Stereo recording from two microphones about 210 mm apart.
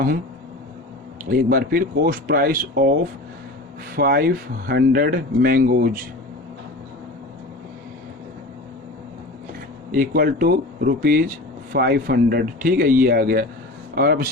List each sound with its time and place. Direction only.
1.3 s speech: 45° right (ahead or behind)
3.9 s speech: 45° right (ahead or behind)
9.9 s speech: 40° right (ahead or behind)